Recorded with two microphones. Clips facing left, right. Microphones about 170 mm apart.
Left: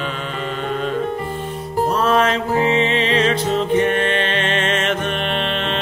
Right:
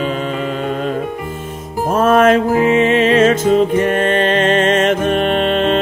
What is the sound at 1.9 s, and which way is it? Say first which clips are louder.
Music: right 8 dB; 50° right (ahead or behind).